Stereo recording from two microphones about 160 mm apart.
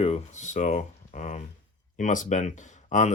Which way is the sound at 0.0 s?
45° left (ahead or behind).